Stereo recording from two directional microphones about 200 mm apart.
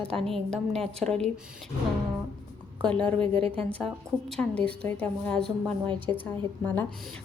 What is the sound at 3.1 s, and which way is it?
Speech, 25° right (ahead or behind).